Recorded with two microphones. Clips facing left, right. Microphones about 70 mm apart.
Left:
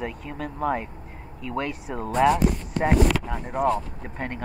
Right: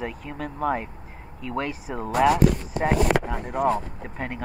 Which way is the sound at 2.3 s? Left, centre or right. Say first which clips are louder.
Right 2 dB; right.